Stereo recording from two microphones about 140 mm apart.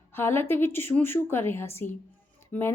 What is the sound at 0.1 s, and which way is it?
Speech, 15° left (ahead or behind).